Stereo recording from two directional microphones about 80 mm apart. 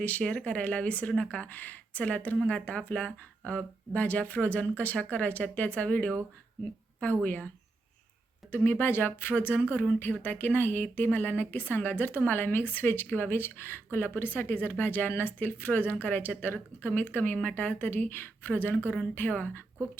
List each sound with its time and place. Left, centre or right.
0.0 s speech: centre
8.4 s a woman's voice: left